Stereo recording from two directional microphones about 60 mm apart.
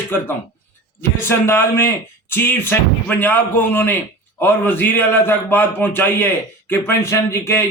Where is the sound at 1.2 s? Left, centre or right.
Left.